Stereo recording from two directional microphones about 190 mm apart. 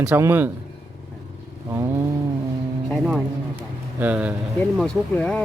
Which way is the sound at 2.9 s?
Centre (ahead or behind).